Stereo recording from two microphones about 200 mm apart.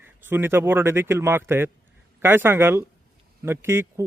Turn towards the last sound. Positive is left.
turn(degrees=-10)  # may be behind; listen again after turning